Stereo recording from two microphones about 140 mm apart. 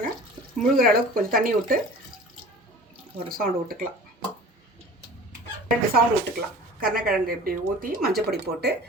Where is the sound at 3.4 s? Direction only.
90° right.